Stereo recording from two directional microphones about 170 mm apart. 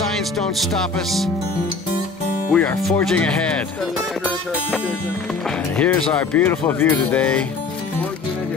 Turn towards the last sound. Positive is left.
turn(degrees=5)  # may be behind; listen again after turning